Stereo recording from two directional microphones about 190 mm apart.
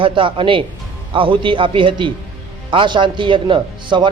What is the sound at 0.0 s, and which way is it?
A man's voice, 25° right (ahead or behind).